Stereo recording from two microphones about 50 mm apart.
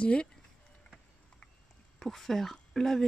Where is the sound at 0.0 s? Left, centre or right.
Left.